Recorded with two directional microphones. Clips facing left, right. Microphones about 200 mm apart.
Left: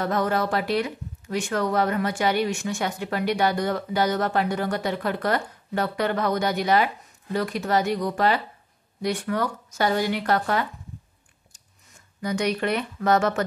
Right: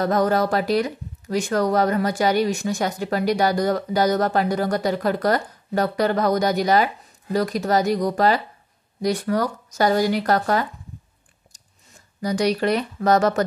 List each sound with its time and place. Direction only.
0.0 s speech: 40° right (ahead or behind)
11.5 s a sound: 35° right (ahead or behind)
12.2 s speech: 35° right (ahead or behind)